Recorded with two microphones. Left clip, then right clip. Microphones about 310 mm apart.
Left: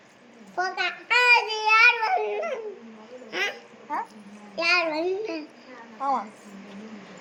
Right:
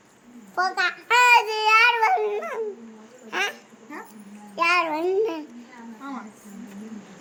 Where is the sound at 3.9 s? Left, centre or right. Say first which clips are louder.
Left 9 dB; centre.